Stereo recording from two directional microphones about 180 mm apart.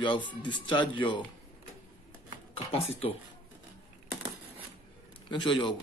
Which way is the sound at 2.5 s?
35° left (ahead or behind).